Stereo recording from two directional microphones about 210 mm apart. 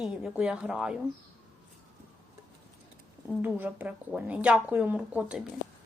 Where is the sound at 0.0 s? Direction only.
5° right (ahead or behind).